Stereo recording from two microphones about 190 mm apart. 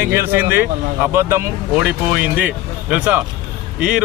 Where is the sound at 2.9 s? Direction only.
10° right (ahead or behind).